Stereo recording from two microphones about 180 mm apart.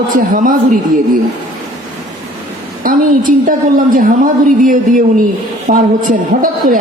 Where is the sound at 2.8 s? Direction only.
50° right (ahead or behind).